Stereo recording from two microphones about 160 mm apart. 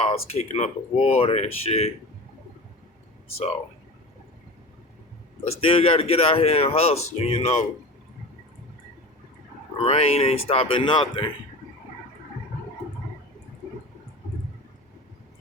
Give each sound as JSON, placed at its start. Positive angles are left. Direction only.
{"t": 0.1, "sound": "speech", "side_deg": 40}
{"t": 5.5, "sound": "speech", "side_deg": 35}
{"t": 9.8, "sound": "speech", "side_deg": 40}